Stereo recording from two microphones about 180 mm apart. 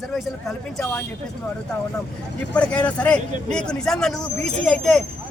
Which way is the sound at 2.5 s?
5° left (ahead or behind).